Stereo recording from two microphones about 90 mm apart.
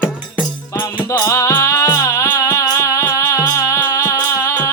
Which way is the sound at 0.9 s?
45° left (ahead or behind).